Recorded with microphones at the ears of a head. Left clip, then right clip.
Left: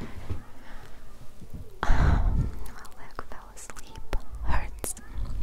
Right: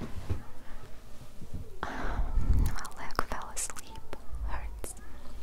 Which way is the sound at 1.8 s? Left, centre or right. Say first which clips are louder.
Left 7 dB; left.